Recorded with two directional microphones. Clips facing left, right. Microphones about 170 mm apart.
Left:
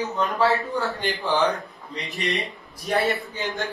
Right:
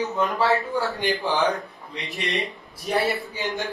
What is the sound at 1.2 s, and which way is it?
Speech, 20° right (ahead or behind).